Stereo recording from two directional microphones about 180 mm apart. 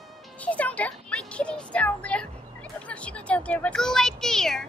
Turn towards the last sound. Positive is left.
turn(degrees=0)  # may be behind; listen again after turning